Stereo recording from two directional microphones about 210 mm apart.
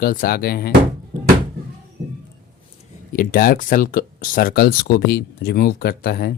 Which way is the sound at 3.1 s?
45° left (ahead or behind).